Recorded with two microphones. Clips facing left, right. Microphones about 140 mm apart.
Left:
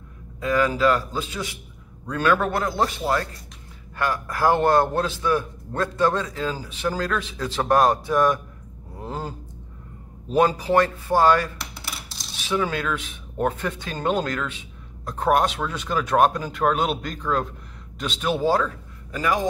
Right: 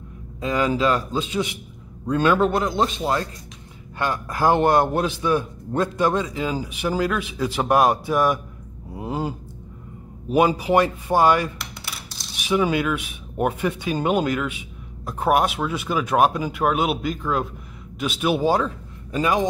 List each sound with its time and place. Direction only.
0.4 s a man's voice: 20° right (ahead or behind)